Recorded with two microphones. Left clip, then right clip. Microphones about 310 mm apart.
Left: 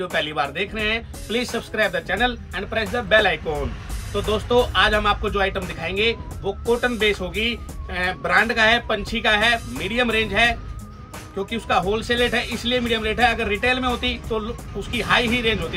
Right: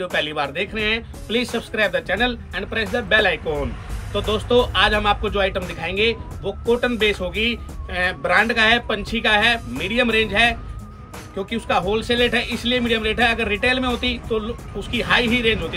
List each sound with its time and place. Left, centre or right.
0.0 s speech: centre